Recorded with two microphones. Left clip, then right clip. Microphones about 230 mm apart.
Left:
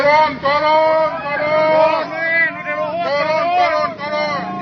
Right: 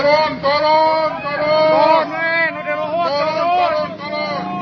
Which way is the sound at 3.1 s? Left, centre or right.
Left.